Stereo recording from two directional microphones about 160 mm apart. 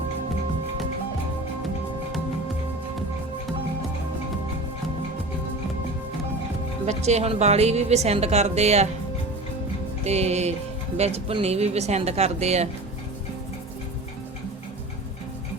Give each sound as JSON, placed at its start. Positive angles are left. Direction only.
{"t": 6.8, "sound": "speech", "side_deg": -45}
{"t": 10.0, "sound": "speech", "side_deg": -40}